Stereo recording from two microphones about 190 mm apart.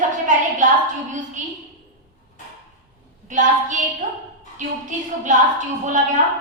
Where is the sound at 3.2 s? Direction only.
40° right (ahead or behind).